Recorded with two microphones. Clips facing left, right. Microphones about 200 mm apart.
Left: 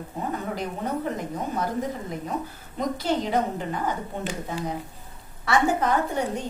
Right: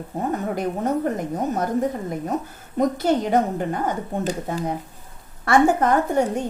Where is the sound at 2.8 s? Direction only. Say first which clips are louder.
Right 6 dB; 50° right (ahead or behind).